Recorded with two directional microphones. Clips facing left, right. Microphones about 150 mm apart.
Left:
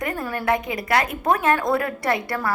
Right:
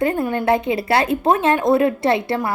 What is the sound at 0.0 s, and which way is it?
A woman's voice, 25° right (ahead or behind).